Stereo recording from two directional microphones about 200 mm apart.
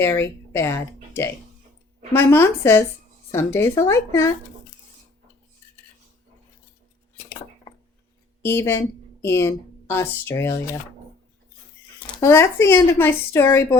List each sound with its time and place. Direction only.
0.0 s speech: 15° left (ahead or behind)
2.1 s speech: 10° left (ahead or behind)
7.7 s glass: 25° left (ahead or behind)
8.4 s speech: 10° left (ahead or behind)
11.9 s speech: 10° left (ahead or behind)